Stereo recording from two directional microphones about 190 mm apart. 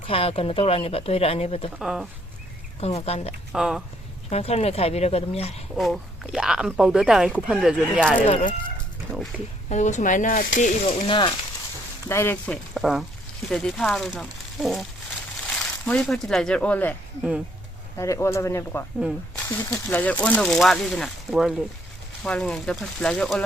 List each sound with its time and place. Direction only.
0.1 s speech: 30° left (ahead or behind)
1.8 s speech: centre (ahead or behind)
2.8 s speech: 30° left (ahead or behind)
3.5 s speech: 5° right (ahead or behind)
4.3 s speech: 35° left (ahead or behind)
5.7 s speech: centre (ahead or behind)
8.3 s speech: 40° left (ahead or behind)
9.3 s speech: 5° right (ahead or behind)
9.6 s speech: 40° left (ahead or behind)
10.8 s speech: 25° left (ahead or behind)
12.0 s speech: 15° left (ahead or behind)
12.7 s speech: centre (ahead or behind)
17.9 s speech: 15° left (ahead or behind)